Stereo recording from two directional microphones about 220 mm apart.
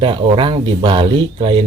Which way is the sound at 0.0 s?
20° right (ahead or behind).